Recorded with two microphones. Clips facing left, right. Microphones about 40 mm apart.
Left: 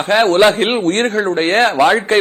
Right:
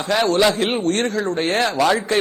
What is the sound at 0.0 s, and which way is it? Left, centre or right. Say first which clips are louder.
A man's voice: left 6 dB; left.